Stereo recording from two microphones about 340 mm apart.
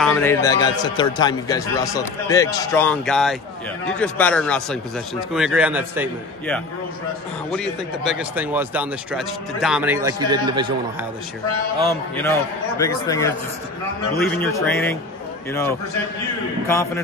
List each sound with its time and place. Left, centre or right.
0.0 s a man's voice: centre
11.9 s a man's voice: centre
16.6 s a man's voice: centre